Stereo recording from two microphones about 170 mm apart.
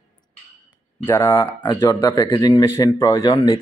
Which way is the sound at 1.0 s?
15° left (ahead or behind).